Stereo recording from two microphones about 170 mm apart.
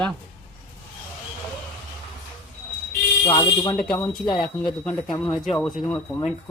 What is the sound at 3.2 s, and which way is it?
Speech, 25° left (ahead or behind).